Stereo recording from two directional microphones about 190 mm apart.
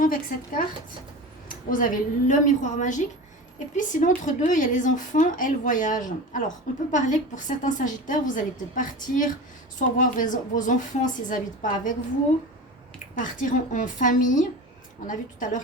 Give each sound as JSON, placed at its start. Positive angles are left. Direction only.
{"t": 0.0, "sound": "a woman's voice", "side_deg": 45}
{"t": 13.1, "sound": "speech", "side_deg": 45}